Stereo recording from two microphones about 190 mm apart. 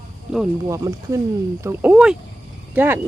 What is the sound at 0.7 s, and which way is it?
Speech, 15° right (ahead or behind).